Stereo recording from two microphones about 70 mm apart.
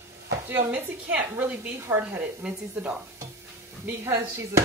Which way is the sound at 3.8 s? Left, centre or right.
Right.